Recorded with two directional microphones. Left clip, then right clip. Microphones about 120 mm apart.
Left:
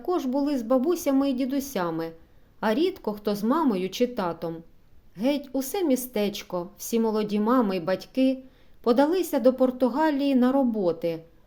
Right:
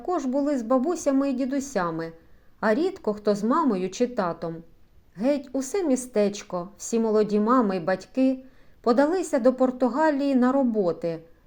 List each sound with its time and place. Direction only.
0.0 s a woman's voice: 15° left (ahead or behind)